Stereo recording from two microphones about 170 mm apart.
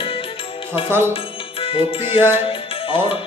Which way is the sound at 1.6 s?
35° left (ahead or behind).